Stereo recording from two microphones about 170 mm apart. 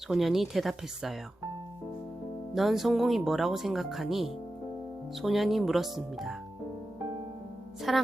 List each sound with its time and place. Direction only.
0.1 s speech: centre (ahead or behind)
2.6 s speech: centre (ahead or behind)
7.8 s speech: centre (ahead or behind)